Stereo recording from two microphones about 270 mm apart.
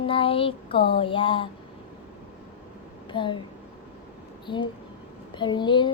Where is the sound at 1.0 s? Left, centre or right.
Centre.